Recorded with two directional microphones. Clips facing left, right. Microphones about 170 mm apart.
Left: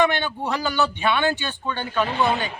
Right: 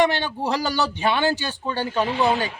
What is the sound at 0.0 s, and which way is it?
A man's voice, 35° right (ahead or behind).